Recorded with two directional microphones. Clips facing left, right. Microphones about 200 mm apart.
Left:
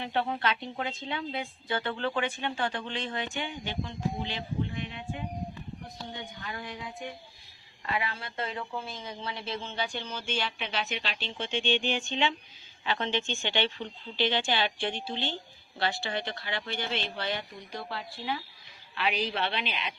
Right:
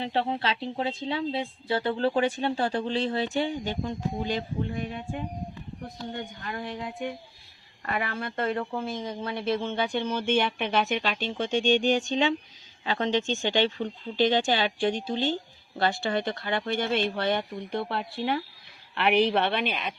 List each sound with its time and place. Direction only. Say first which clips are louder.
0.0 s a woman's voice: right 2 dB; 30° right (ahead or behind)
6.1 s a woman's voice: right 5 dB; 55° right (ahead or behind)